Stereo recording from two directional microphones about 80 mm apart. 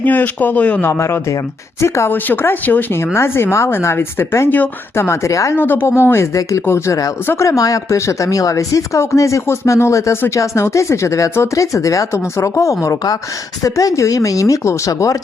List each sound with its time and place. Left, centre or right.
0.0 s speech: left
0.9 s speech: left
2.1 s speech: left
5.0 s speech: left
5.5 s speech: left